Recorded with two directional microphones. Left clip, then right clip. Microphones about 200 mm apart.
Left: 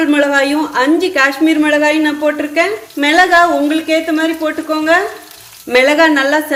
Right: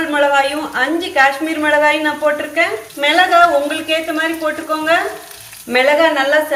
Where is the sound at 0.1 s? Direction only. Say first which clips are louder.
Right 2 dB; 55° left (ahead or behind).